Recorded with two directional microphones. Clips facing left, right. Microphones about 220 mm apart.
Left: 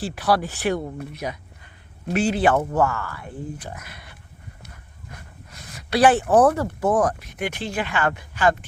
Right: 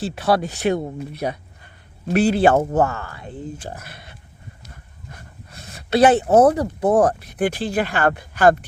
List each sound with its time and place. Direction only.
0.0 s speech: 25° right (ahead or behind)
5.5 s a sound: 30° right (ahead or behind)
6.3 s speech: 20° right (ahead or behind); by 8.5 s 40° right (ahead or behind)